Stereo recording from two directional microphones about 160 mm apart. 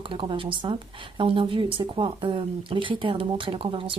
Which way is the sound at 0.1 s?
35° right (ahead or behind).